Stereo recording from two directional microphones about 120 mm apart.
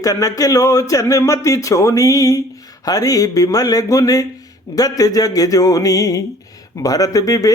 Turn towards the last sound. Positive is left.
turn(degrees=30)  # may be behind; listen again after turning